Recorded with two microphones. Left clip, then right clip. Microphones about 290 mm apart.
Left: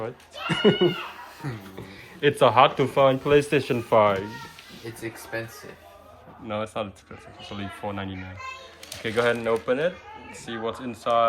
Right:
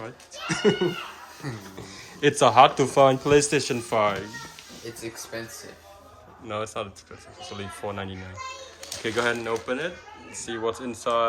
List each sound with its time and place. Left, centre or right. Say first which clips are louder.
0.0 s speech: left 3 dB; centre
2.2 s speech: right 1 dB; centre
6.5 s speech: left 1 dB; centre